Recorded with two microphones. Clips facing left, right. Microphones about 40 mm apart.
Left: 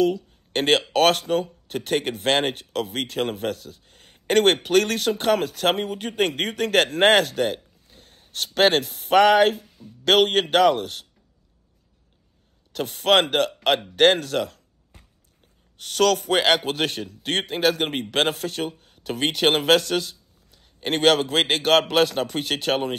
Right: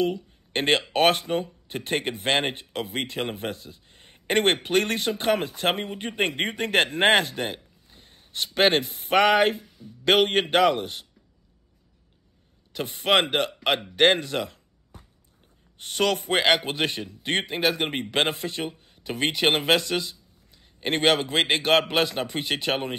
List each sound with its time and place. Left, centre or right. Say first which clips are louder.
0.0 s a man's voice: left 4 dB; right
12.7 s speech: left 3 dB; centre
15.8 s speech: left 4 dB; centre